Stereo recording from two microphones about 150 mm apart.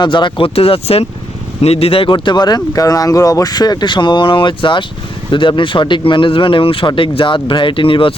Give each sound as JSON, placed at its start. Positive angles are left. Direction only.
{"t": 0.0, "sound": "speech", "side_deg": 30}